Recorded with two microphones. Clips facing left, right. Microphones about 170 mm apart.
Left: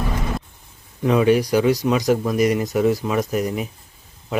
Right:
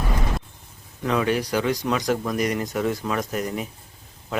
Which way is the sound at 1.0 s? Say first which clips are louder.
Left 6 dB; 15° left (ahead or behind).